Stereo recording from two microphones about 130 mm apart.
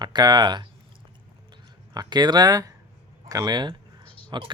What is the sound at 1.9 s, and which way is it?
Speech, 30° right (ahead or behind).